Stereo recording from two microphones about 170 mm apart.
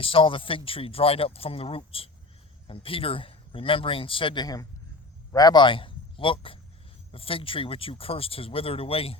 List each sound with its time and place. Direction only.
0.0 s speech: 30° left (ahead or behind)